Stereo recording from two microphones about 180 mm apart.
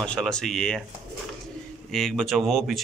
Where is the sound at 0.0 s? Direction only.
5° left (ahead or behind).